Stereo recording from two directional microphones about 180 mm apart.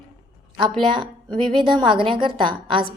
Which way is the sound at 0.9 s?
25° right (ahead or behind).